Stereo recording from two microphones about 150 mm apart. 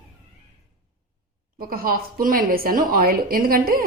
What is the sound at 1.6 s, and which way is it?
A woman's voice, 80° right.